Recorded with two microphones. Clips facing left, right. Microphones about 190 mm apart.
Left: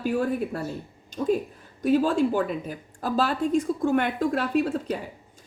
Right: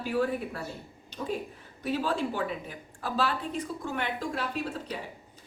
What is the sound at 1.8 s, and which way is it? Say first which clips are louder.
A woman's voice: left 8 dB; 45° left (ahead or behind).